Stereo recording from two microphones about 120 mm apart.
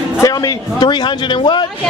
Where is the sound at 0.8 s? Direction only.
40° left (ahead or behind).